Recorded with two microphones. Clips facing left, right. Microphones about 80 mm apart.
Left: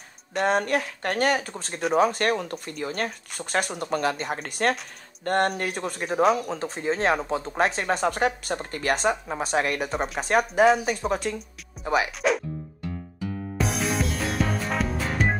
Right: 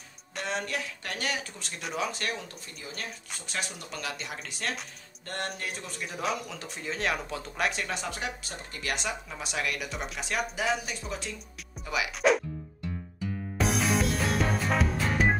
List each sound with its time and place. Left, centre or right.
0.4 s speech: left
6.5 s speech: left
12.2 s speech: centre
13.6 s music: centre